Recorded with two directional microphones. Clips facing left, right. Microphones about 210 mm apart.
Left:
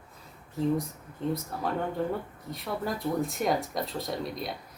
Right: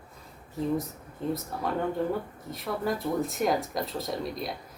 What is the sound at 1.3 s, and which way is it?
Speech, centre (ahead or behind).